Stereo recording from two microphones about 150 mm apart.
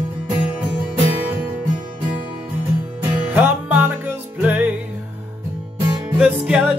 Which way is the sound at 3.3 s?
10° right (ahead or behind).